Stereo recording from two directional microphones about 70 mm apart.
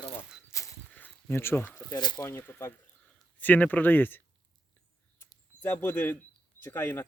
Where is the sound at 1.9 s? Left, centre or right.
Left.